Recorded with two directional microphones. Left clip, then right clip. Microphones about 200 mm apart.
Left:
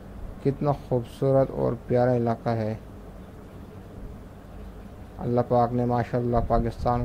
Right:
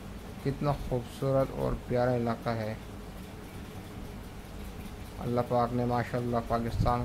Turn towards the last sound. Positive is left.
turn(degrees=20)  # may be behind; listen again after turning